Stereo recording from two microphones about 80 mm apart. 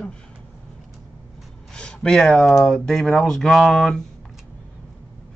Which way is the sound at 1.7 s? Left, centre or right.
Centre.